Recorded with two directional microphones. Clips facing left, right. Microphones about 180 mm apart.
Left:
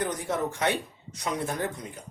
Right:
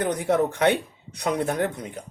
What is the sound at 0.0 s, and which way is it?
Speech, 65° right (ahead or behind).